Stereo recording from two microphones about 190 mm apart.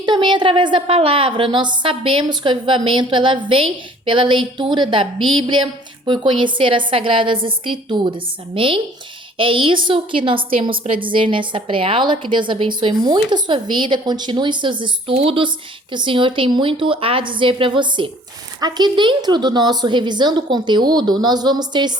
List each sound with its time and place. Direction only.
0.0 s a woman's voice: 25° right (ahead or behind)